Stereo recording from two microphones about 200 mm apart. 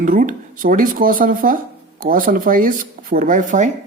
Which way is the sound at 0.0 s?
40° right (ahead or behind).